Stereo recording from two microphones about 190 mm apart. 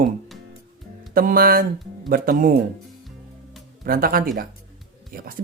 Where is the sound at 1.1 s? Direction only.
50° right (ahead or behind).